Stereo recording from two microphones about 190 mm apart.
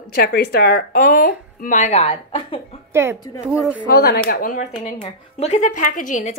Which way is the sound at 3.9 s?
55° left (ahead or behind).